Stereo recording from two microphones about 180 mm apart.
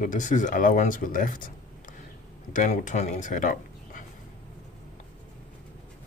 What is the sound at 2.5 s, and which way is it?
Speech, 45° left (ahead or behind).